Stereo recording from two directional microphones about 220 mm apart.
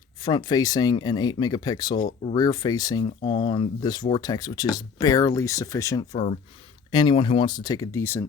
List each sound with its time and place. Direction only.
0.3 s speech: 20° left (ahead or behind)